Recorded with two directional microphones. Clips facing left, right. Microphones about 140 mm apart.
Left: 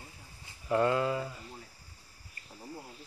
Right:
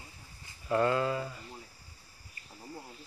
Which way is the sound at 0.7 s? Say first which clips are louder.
Even; 15° left (ahead or behind).